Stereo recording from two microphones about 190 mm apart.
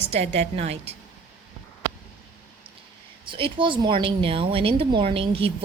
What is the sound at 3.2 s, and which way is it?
A woman's voice, 25° right (ahead or behind).